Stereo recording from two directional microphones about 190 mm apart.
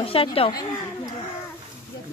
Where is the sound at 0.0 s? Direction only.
30° left (ahead or behind).